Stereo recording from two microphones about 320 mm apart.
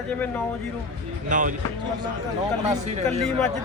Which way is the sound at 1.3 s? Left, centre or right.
Right.